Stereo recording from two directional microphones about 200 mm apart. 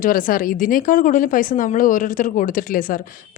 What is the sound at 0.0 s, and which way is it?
Speech, 45° left (ahead or behind).